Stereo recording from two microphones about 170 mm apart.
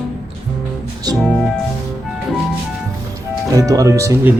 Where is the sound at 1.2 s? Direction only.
5° left (ahead or behind).